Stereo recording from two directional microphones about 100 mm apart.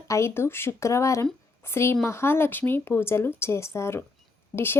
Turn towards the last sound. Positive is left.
turn(degrees=20)  # may be behind; listen again after turning